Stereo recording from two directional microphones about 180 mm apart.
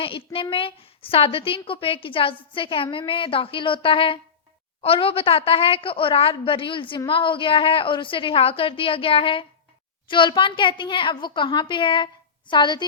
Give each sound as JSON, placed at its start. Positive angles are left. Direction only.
{"t": 0.5, "sound": "a woman's voice", "side_deg": 30}
{"t": 2.3, "sound": "a woman's voice", "side_deg": 10}
{"t": 2.6, "sound": "a woman's voice", "side_deg": 30}